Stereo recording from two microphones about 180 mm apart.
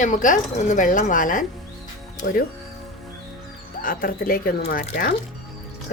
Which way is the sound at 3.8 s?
50° left (ahead or behind).